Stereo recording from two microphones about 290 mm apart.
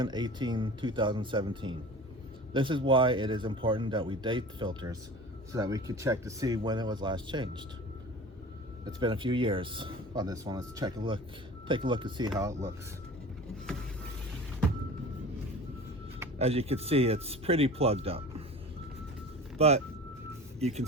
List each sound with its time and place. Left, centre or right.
0.0 s speech: centre
9.0 s speech: centre
16.4 s speech: right
19.5 s speech: right